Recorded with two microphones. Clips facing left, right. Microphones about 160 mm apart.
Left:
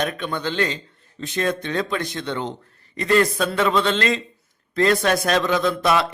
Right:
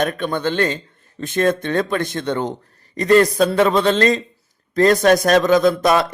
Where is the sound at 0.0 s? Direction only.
50° right (ahead or behind).